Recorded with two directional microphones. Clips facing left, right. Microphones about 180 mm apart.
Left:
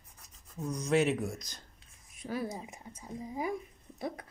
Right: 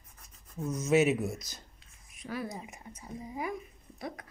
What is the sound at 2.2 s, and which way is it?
Speech, 30° left (ahead or behind).